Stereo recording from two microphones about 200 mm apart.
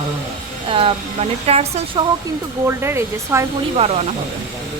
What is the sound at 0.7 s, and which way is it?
Speech, 25° right (ahead or behind).